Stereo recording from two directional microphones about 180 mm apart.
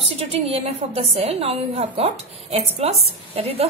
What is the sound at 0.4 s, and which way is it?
A woman's voice, 35° right (ahead or behind).